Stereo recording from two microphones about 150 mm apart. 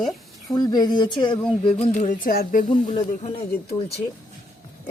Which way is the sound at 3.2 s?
40° left (ahead or behind).